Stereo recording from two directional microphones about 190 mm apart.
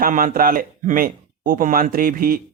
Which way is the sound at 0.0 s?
45° right (ahead or behind).